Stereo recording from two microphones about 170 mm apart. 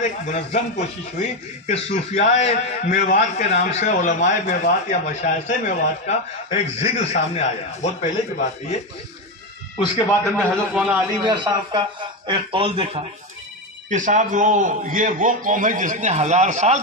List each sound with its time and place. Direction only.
0.0 s speech: 45° left (ahead or behind)
10.3 s a man's voice: centre (ahead or behind)
11.2 s speech: 25° right (ahead or behind)
13.8 s a man's voice: 45° right (ahead or behind)